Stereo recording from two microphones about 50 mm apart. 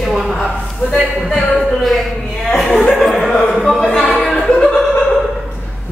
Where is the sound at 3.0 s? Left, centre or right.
Centre.